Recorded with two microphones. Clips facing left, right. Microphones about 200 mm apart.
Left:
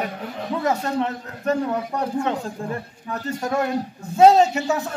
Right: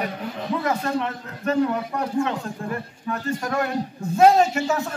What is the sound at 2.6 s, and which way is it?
A man's voice, 30° left (ahead or behind).